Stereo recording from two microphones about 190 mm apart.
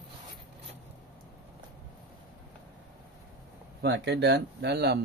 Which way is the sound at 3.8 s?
60° right (ahead or behind).